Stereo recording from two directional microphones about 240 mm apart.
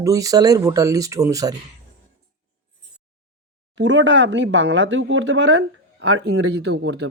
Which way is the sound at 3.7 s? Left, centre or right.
Right.